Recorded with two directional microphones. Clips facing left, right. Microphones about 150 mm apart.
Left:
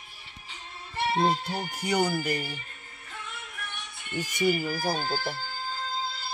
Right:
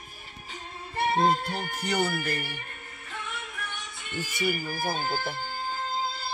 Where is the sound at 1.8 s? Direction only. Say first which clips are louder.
Left 2 dB; 10° left (ahead or behind).